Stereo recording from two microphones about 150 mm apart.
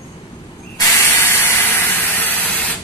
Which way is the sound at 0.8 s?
15° left (ahead or behind).